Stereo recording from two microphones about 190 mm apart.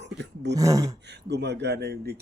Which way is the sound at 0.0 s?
65° right (ahead or behind).